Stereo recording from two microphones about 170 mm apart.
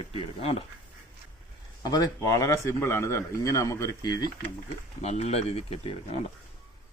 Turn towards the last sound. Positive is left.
turn(degrees=35)  # may be behind; listen again after turning